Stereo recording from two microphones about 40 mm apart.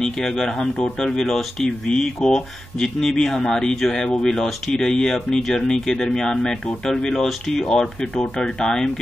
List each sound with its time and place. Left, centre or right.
0.0 s speech: centre
1.2 s speech: centre
1.9 s speech: centre
8.4 s speech: centre